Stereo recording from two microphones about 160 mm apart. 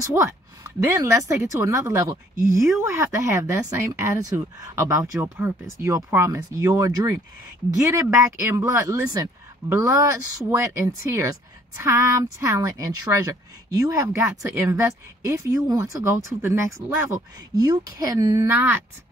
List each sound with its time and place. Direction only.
0.0 s speech: 20° right (ahead or behind)